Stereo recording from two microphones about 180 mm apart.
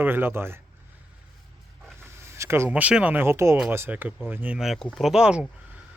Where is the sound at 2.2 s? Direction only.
15° right (ahead or behind).